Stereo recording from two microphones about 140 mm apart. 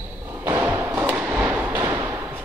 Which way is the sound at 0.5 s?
20° right (ahead or behind).